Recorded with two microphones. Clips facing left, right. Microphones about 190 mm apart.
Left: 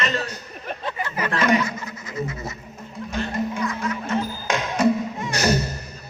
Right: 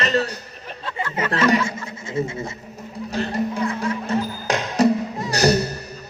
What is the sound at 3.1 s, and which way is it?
Music, 35° right (ahead or behind).